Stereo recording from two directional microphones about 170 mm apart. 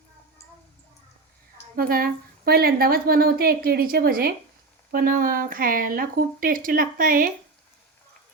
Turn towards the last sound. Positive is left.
turn(degrees=-55)  # may be behind; listen again after turning